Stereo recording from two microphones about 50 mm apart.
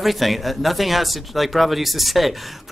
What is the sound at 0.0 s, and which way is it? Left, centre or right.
Speech, centre.